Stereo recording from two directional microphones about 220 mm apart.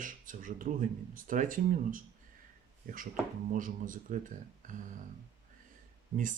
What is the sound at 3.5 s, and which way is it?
Speech, 35° right (ahead or behind).